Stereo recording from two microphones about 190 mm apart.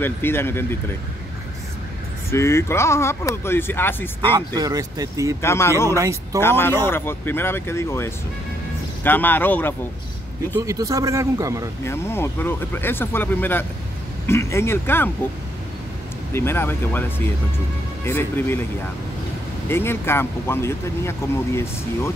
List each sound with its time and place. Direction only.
0.0 s speech: 10° left (ahead or behind)
2.3 s speech: 15° left (ahead or behind)
4.6 s speech: 20° right (ahead or behind)
5.4 s speech: 15° left (ahead or behind)
5.9 s a man's voice: 15° right (ahead or behind)
6.4 s speech: 10° left (ahead or behind)
10.6 s a man's voice: 20° right (ahead or behind)
11.8 s speech: 15° left (ahead or behind)
16.3 s speech: 10° left (ahead or behind)
19.7 s speech: 10° left (ahead or behind)